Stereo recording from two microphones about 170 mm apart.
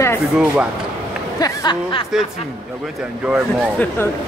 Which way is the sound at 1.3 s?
25° left (ahead or behind).